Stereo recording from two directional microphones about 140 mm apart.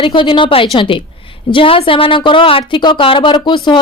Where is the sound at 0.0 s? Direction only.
35° left (ahead or behind).